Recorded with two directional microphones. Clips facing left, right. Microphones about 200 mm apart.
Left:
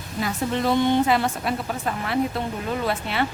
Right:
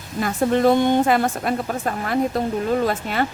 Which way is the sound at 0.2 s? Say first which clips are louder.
Right 6 dB; 50° right (ahead or behind).